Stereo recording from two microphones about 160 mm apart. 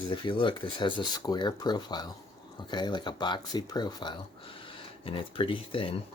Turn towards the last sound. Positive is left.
turn(degrees=35)  # may be behind; listen again after turning